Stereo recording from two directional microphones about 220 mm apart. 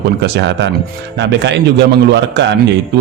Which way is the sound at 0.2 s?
50° right (ahead or behind).